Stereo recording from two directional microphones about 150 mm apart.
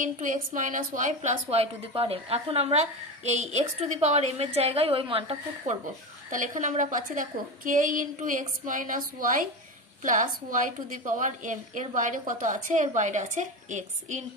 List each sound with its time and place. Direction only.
0.0 s a woman's voice: 60° right (ahead or behind); by 5.4 s 35° right (ahead or behind)
5.7 s a woman's voice: 50° right (ahead or behind)